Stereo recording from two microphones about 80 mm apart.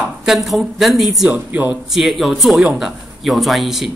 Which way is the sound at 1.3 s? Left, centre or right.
Centre.